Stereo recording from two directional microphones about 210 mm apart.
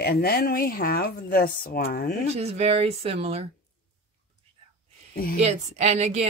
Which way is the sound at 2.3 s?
30° right (ahead or behind).